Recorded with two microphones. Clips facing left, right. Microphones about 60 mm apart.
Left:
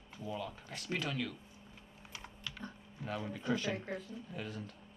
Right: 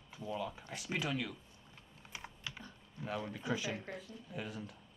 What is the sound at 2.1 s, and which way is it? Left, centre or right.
Typing, centre.